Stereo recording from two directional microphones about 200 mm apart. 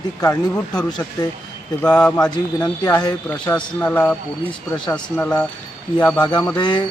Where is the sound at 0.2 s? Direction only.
10° left (ahead or behind).